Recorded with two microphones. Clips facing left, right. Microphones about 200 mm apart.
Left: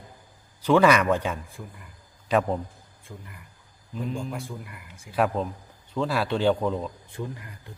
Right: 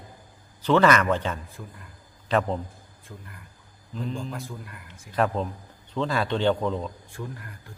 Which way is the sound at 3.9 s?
5° left (ahead or behind).